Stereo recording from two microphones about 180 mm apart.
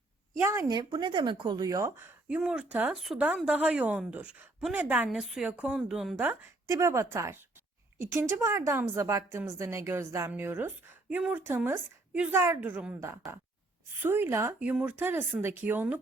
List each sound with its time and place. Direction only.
0.4 s speech: 15° right (ahead or behind)
6.7 s speech: 15° right (ahead or behind)